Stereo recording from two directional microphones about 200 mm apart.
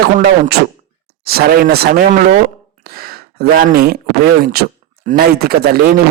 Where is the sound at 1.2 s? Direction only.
50° right (ahead or behind).